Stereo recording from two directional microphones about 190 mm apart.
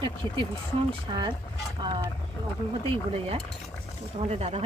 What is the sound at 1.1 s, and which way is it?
Speech, 25° right (ahead or behind).